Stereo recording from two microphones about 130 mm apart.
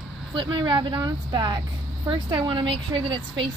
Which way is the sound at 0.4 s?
35° right (ahead or behind).